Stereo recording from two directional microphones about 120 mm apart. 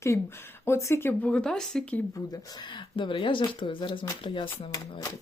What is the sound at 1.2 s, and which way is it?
Speech, 5° left (ahead or behind).